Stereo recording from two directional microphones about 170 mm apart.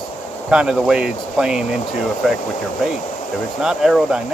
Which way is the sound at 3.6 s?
Centre (ahead or behind).